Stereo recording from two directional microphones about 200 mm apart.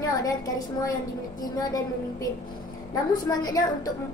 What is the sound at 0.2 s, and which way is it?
Speech, 20° left (ahead or behind).